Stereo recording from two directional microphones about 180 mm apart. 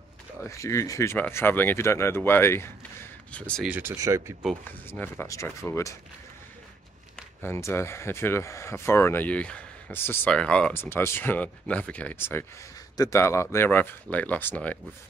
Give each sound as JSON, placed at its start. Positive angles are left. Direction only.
{"t": 0.4, "sound": "speech", "side_deg": 15}
{"t": 3.6, "sound": "speech", "side_deg": -10}
{"t": 4.6, "sound": "speech", "side_deg": 10}
{"t": 7.4, "sound": "speech", "side_deg": 15}